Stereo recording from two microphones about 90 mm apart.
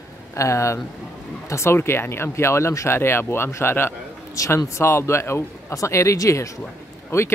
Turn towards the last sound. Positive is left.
turn(degrees=30)  # may be behind; listen again after turning